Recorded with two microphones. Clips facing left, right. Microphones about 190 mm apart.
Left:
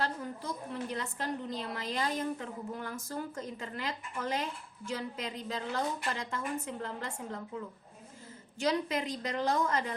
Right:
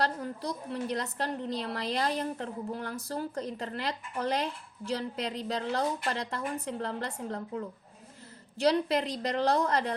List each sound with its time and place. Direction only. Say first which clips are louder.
0.0 s a woman's voice: right 4 dB; 35° right (ahead or behind)